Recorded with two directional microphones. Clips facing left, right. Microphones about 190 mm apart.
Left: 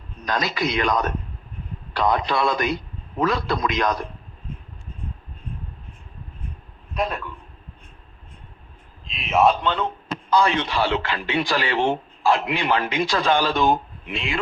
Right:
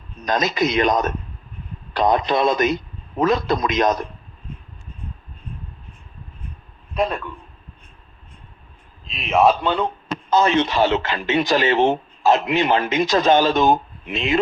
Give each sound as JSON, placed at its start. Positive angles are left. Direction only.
{"t": 0.2, "sound": "a man's voice", "side_deg": -20}
{"t": 6.9, "sound": "a man's voice", "side_deg": 0}
{"t": 9.0, "sound": "a man's voice", "side_deg": 0}
{"t": 9.6, "sound": "speech", "side_deg": -10}
{"t": 10.2, "sound": "speech", "side_deg": -20}